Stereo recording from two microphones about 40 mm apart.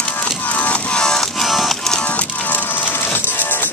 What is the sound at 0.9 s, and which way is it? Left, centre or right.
Music, centre.